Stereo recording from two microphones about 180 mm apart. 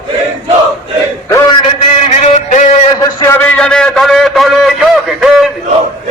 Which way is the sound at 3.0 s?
15° left (ahead or behind).